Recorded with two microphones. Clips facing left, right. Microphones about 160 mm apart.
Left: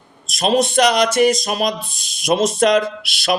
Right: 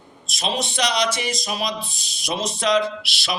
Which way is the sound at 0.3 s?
50° left (ahead or behind).